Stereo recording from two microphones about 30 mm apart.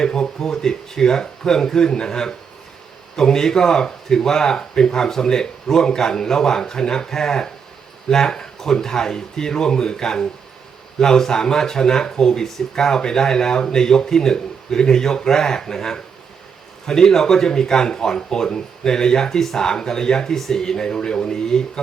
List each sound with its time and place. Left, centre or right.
0.0 s speech: centre